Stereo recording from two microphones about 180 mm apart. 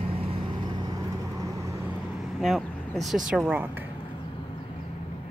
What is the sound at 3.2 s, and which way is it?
Speech, 5° right (ahead or behind).